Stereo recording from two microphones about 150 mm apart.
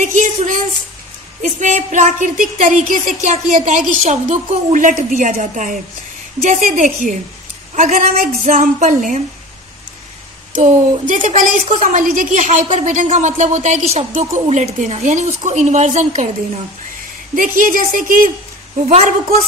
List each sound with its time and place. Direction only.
0.0 s speech: 55° right (ahead or behind)
10.5 s speech: 60° right (ahead or behind)
17.4 s speech: 65° right (ahead or behind)
18.9 s speech: 50° right (ahead or behind)